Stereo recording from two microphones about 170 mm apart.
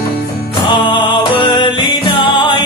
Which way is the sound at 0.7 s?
25° left (ahead or behind).